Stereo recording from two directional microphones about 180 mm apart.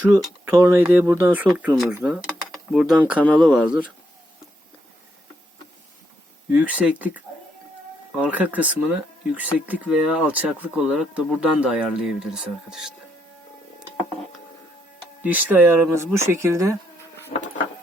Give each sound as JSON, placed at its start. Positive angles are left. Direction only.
{"t": 0.0, "sound": "speech", "side_deg": -10}
{"t": 6.5, "sound": "speech", "side_deg": -10}
{"t": 15.2, "sound": "speech", "side_deg": -10}
{"t": 17.3, "sound": "vehicle", "side_deg": 55}